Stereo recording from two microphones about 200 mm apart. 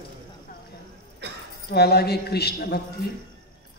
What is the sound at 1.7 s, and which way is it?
A man's voice, 55° left (ahead or behind).